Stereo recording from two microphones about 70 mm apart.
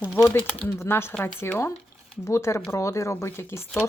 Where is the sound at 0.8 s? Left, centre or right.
Left.